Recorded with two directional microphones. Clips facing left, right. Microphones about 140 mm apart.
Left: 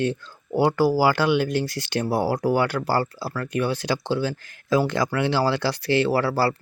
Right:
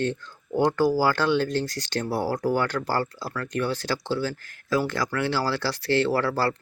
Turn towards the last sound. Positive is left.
turn(degrees=10)  # may be behind; listen again after turning